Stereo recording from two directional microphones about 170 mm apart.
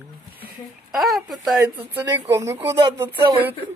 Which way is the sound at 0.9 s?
Centre (ahead or behind).